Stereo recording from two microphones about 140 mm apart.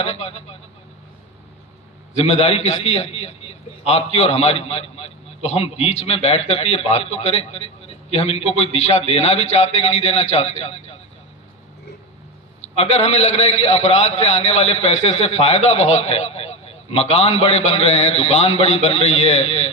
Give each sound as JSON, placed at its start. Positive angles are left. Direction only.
{"t": 0.0, "sound": "a man's voice", "side_deg": 50}
{"t": 2.1, "sound": "a man's voice", "side_deg": 50}
{"t": 12.7, "sound": "a man's voice", "side_deg": 50}